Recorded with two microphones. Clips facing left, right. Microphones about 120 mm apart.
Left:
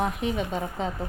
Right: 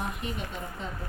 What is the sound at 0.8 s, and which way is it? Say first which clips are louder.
Speech: left 9 dB; 90° left.